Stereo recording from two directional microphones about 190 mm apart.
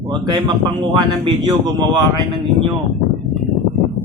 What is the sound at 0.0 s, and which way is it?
A man's voice, 20° right (ahead or behind).